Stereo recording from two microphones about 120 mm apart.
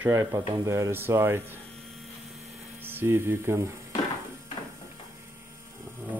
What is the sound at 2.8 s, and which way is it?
Speech, 20° right (ahead or behind).